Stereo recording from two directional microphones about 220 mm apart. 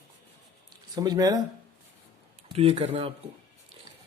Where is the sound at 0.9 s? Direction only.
15° right (ahead or behind).